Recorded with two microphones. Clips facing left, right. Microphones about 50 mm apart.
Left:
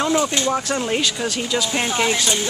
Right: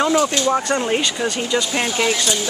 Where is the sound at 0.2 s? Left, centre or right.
Left.